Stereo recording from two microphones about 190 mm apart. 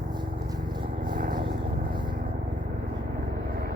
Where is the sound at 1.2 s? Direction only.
50° right (ahead or behind).